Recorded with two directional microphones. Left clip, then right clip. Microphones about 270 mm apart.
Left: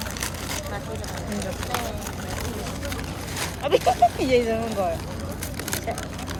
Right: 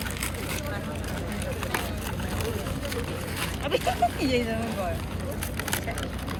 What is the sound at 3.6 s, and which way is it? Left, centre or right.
Speech, left.